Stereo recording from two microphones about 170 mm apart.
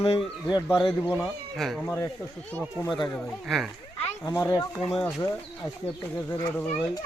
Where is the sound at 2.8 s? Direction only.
25° left (ahead or behind).